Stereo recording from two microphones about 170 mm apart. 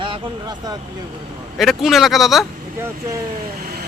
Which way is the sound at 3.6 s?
60° right (ahead or behind).